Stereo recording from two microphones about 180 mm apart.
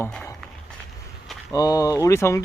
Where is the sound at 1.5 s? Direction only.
20° left (ahead or behind).